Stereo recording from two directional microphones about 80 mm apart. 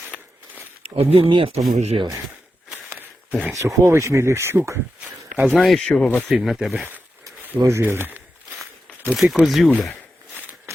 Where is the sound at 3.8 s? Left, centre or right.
Right.